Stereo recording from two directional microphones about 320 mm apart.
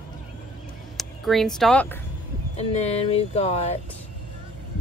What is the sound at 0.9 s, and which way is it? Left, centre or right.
Speech, centre.